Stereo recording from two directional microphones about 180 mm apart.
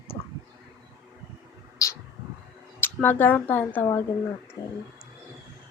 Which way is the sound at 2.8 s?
10° left (ahead or behind).